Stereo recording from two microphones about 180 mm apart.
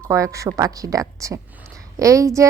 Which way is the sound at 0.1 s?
15° right (ahead or behind).